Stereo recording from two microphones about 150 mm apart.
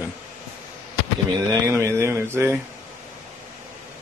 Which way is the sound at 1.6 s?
20° right (ahead or behind).